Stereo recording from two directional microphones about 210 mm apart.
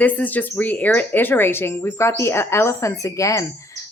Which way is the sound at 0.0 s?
5° left (ahead or behind).